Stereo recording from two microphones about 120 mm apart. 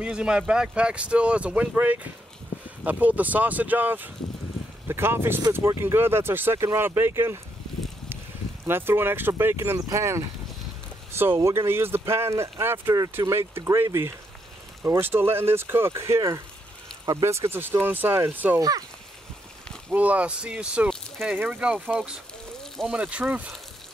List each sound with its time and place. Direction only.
0.0 s speech: 5° right (ahead or behind)
8.6 s speech: 20° right (ahead or behind)
18.6 s speech: 30° right (ahead or behind)
19.9 s speech: 10° right (ahead or behind)